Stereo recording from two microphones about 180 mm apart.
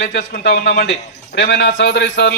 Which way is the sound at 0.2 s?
60° left (ahead or behind).